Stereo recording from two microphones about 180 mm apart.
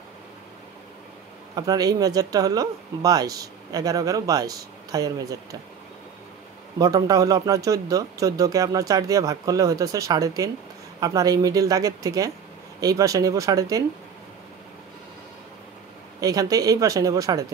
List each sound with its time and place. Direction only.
1.5 s speech: 20° right (ahead or behind)
6.8 s speech: 20° right (ahead or behind)
16.2 s speech: 20° right (ahead or behind)